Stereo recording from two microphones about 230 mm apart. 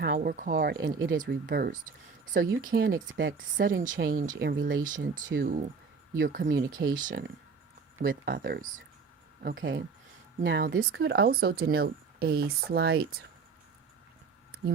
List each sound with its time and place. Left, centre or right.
0.0 s speech: right
1.2 s speech: right
3.2 s speech: right
3.8 s speech: right
4.4 s speech: right